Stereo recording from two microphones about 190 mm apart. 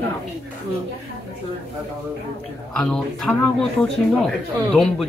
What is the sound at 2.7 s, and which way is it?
Speech, 5° left (ahead or behind).